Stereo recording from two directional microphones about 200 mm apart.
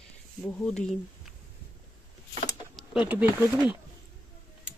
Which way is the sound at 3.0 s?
10° right (ahead or behind).